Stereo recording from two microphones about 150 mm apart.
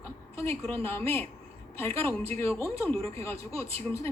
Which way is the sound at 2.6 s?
20° left (ahead or behind).